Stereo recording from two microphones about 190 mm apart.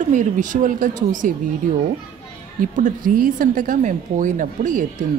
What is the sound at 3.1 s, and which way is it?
Speech, 45° right (ahead or behind).